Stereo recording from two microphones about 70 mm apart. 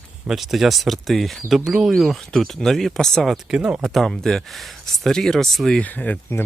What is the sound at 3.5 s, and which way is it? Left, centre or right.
Speech, centre.